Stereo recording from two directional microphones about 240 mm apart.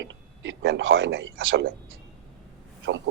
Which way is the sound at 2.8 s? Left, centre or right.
Right.